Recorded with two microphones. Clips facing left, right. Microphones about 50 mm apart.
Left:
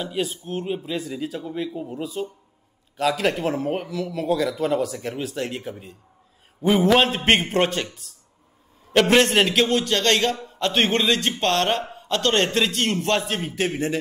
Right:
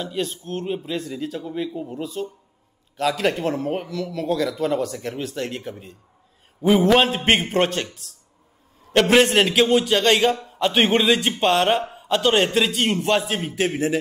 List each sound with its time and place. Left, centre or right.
0.0 s a man's voice: centre